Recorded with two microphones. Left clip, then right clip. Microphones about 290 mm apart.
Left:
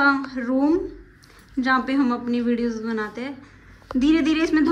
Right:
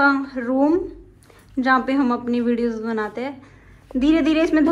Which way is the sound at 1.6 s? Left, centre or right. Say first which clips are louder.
Right 3 dB; centre.